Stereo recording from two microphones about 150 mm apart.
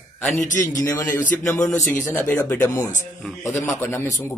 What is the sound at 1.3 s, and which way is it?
A man's voice, 10° left (ahead or behind).